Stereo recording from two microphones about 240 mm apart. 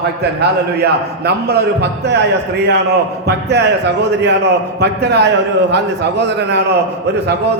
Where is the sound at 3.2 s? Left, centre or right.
Right.